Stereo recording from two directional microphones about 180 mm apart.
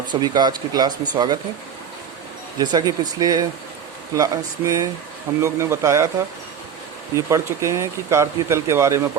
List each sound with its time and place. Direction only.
0.1 s speech: 25° right (ahead or behind)
2.6 s speech: 20° right (ahead or behind)